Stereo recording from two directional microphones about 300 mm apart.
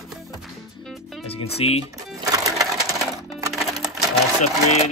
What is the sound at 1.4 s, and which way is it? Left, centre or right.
Speech, centre.